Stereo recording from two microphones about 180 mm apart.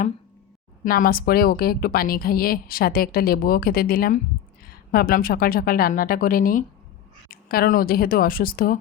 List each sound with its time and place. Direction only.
0.9 s a woman's voice: 55° left (ahead or behind)